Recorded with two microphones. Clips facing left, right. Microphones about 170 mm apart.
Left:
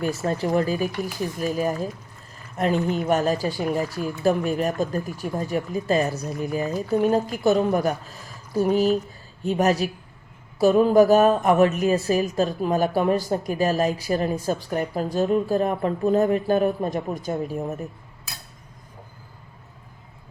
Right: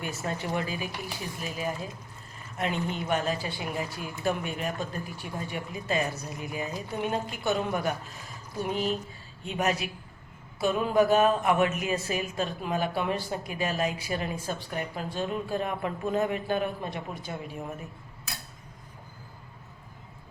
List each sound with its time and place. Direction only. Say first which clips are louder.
0.0 s a woman's voice: left 9 dB; 40° left (ahead or behind)